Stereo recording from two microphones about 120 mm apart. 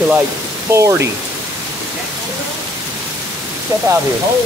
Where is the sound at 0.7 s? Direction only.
25° right (ahead or behind).